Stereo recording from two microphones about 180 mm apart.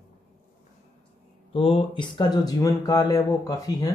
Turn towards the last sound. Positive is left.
turn(degrees=20)  # may be behind; listen again after turning